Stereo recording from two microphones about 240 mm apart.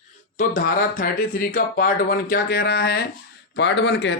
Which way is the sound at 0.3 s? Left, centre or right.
Left.